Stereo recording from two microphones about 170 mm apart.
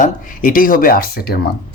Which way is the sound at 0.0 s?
55° left (ahead or behind).